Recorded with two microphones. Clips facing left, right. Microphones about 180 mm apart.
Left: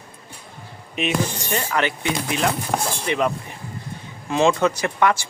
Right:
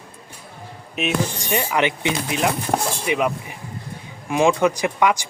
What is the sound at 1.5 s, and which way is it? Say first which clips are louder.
Speech: right 6 dB; 15° right (ahead or behind).